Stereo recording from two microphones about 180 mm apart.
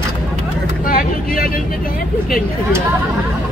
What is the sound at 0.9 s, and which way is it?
Vehicle, 55° left (ahead or behind).